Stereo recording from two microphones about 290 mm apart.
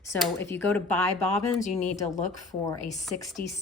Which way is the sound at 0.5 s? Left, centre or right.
Centre.